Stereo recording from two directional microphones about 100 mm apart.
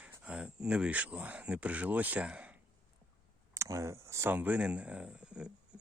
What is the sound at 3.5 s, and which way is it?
Speech, 30° right (ahead or behind).